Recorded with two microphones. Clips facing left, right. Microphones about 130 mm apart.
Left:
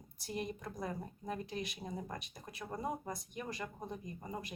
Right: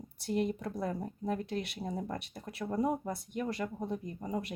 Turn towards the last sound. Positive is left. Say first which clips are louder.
# right 7 dB
turn(degrees=-60)  # may be behind; listen again after turning